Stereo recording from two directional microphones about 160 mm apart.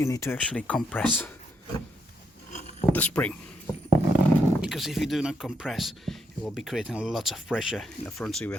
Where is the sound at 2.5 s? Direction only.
45° left (ahead or behind).